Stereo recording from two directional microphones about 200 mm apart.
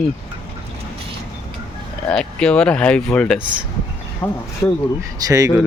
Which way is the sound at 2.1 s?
5° left (ahead or behind).